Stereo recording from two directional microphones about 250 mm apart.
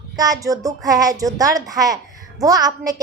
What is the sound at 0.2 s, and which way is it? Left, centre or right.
A woman's voice, centre.